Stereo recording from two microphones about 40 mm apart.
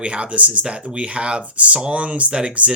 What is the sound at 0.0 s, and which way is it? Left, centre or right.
A man's voice, right.